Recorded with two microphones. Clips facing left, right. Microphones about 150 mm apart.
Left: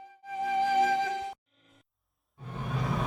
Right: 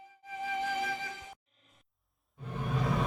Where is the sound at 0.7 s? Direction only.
75° left (ahead or behind).